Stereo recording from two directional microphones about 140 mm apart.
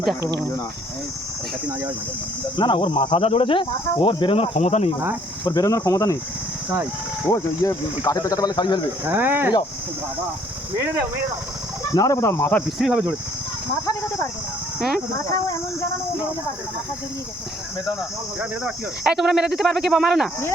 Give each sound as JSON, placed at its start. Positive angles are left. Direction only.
{"t": 2.6, "sound": "speech", "side_deg": 35}
{"t": 5.5, "sound": "speech", "side_deg": 25}
{"t": 7.3, "sound": "speech", "side_deg": 25}
{"t": 9.0, "sound": "speech", "side_deg": -15}
{"t": 11.9, "sound": "speech", "side_deg": 25}
{"t": 12.8, "sound": "speech", "side_deg": -5}
{"t": 18.3, "sound": "speech", "side_deg": -5}